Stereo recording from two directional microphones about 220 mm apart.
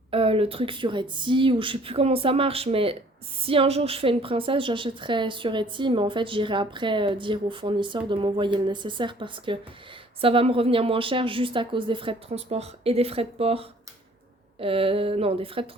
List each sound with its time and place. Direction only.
0.1 s a woman's voice: 25° right (ahead or behind)